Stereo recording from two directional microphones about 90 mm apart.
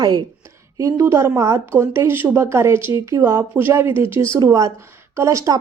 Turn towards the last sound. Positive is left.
turn(degrees=-40)  # may be behind; listen again after turning